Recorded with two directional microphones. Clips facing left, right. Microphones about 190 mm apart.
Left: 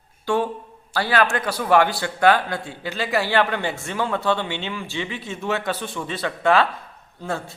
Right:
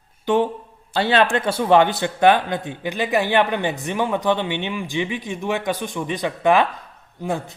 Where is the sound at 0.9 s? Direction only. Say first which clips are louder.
Right 3 dB; 25° right (ahead or behind).